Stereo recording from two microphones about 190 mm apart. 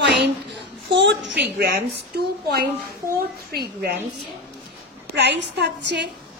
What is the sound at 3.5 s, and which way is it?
Speech, 55° right (ahead or behind).